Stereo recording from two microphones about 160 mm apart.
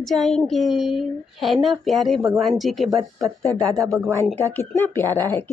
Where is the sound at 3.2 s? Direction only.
20° right (ahead or behind).